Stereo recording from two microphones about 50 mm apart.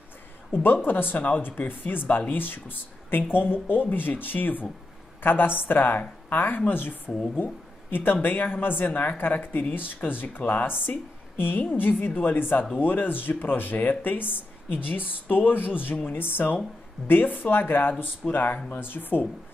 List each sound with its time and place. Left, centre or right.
0.5 s a woman's voice: left
7.1 s speech: centre
7.9 s a woman's voice: left